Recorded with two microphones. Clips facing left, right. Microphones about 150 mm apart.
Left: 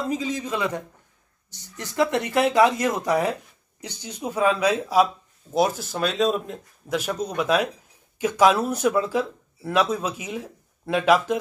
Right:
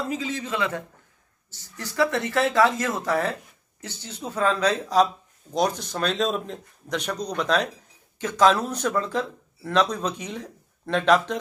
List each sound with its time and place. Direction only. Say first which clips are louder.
0.1 s a man's voice: left 2 dB; 15° left (ahead or behind)